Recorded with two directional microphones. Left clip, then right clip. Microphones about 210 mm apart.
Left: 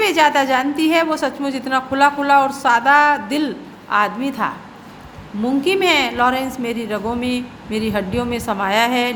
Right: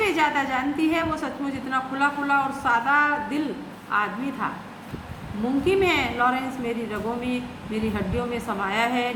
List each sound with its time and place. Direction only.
0.0 s a woman's voice: 45° left (ahead or behind)
5.6 s a woman's voice: 45° left (ahead or behind)